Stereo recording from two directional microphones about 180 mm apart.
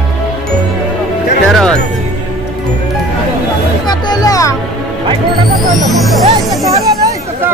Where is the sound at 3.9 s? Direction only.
20° left (ahead or behind).